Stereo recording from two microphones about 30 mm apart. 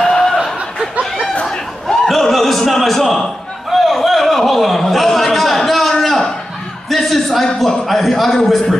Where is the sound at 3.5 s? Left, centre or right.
Centre.